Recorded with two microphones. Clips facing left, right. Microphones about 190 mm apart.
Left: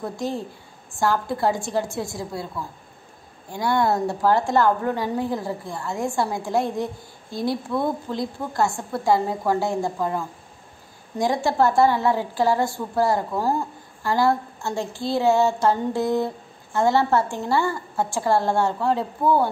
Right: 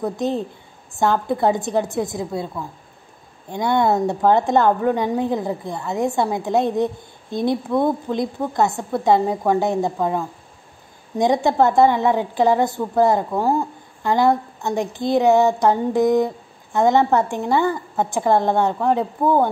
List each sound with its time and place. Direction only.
0.0 s a woman's voice: 20° right (ahead or behind)